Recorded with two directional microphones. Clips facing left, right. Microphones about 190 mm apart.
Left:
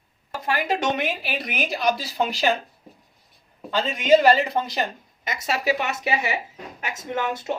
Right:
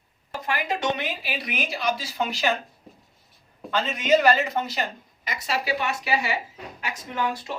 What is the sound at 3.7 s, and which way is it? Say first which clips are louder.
Speech: left 3 dB; 30° left (ahead or behind).